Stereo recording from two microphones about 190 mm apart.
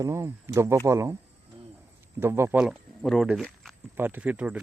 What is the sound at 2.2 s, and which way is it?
Speech, 10° right (ahead or behind).